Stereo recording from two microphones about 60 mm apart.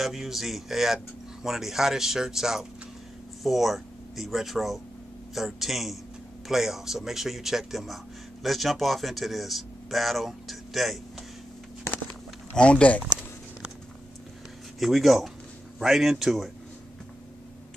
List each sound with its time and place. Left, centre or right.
0.0 s speech: centre
12.5 s speech: centre
14.8 s speech: centre